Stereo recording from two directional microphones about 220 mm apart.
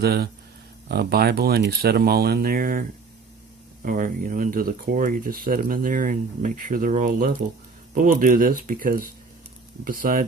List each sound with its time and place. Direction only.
0.0 s speech: 45° right (ahead or behind)
3.8 s speech: 40° right (ahead or behind)